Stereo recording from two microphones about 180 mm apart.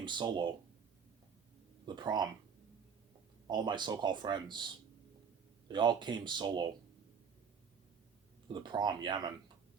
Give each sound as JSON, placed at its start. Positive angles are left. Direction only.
{"t": 0.0, "sound": "speech", "side_deg": -25}
{"t": 2.0, "sound": "speech", "side_deg": -25}
{"t": 3.4, "sound": "speech", "side_deg": -25}
{"t": 5.6, "sound": "speech", "side_deg": -25}
{"t": 8.5, "sound": "speech", "side_deg": -25}